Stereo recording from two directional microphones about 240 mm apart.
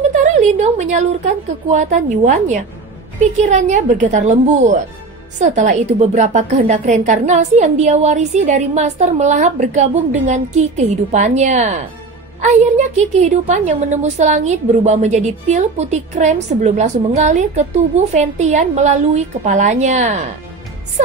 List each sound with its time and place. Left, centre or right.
0.1 s a woman's voice: right